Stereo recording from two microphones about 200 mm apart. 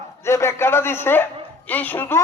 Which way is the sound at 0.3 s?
15° left (ahead or behind).